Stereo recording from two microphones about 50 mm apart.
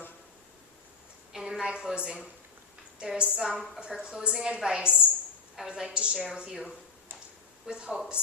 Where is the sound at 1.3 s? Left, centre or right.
Centre.